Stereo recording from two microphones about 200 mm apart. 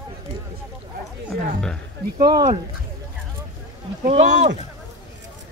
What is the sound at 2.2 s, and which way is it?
Speech, 20° right (ahead or behind).